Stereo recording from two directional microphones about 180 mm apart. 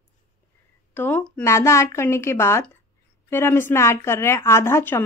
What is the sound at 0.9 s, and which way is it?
A woman's voice, 10° left (ahead or behind).